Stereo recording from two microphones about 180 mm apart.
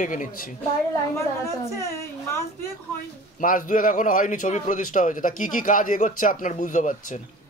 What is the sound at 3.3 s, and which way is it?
A man's voice, 45° left (ahead or behind).